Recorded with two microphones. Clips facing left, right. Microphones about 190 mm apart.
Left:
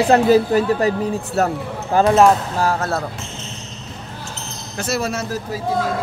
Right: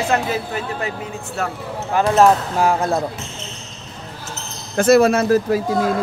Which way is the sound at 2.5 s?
15° right (ahead or behind).